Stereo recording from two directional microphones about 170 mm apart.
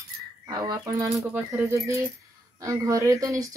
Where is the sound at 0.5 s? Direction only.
20° right (ahead or behind).